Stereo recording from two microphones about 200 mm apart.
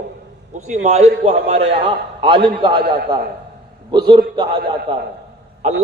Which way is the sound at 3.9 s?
20° right (ahead or behind).